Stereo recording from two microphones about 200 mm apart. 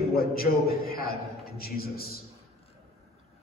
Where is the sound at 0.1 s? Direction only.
50° left (ahead or behind).